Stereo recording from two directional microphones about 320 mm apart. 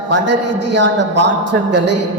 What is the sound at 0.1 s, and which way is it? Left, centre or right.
A man's voice, right.